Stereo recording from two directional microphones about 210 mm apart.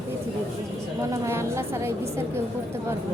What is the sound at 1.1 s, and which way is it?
A woman's voice, 15° right (ahead or behind).